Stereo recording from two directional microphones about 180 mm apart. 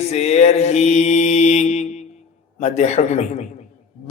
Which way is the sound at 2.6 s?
40° left (ahead or behind).